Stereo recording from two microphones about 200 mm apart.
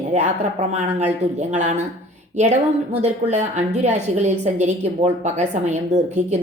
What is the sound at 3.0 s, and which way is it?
A woman's voice, 35° right (ahead or behind).